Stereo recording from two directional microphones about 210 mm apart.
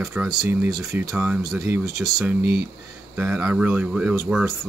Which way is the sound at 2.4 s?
50° right (ahead or behind).